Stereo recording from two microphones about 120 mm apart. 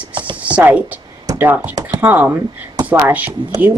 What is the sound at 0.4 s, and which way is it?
Speech, 10° right (ahead or behind).